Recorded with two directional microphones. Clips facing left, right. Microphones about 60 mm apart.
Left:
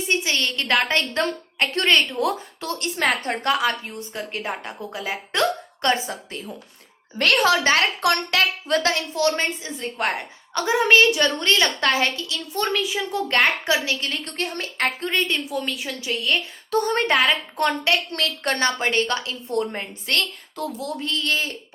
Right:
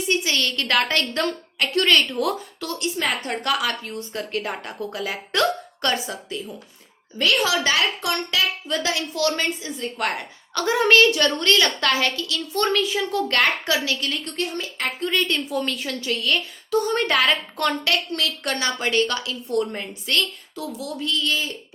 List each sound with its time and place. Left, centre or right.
0.1 s a woman's voice: left
2.8 s a woman's voice: left
7.2 s a woman's voice: left
8.1 s a woman's voice: left
9.1 s a woman's voice: left
12.5 s a woman's voice: centre; by 14.9 s left
15.0 s a woman's voice: left
15.4 s a woman's voice: centre; by 16.4 s left
16.7 s a woman's voice: left
17.1 s a woman's voice: left
18.1 s a woman's voice: left